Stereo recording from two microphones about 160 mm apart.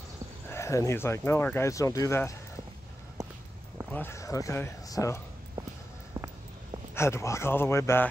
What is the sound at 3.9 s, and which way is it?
Speech, 15° left (ahead or behind).